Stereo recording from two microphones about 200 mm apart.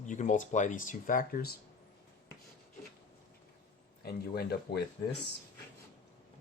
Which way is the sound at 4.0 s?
50° left (ahead or behind).